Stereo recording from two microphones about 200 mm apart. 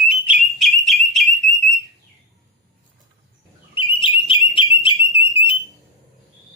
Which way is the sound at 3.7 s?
25° left (ahead or behind).